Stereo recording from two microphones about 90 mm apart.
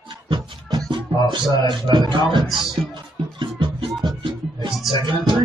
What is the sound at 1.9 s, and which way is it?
Speech, 60° right (ahead or behind).